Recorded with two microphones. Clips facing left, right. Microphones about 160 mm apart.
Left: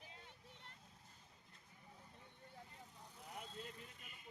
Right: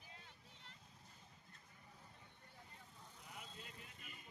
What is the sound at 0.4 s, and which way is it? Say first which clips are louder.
Vehicle: left 3 dB; 60° left (ahead or behind).